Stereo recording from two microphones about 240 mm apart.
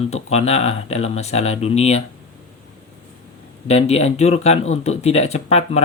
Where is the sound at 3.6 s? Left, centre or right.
Left.